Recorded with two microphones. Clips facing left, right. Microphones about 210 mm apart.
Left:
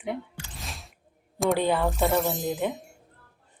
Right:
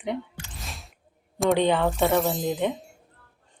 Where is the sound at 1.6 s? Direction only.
5° left (ahead or behind).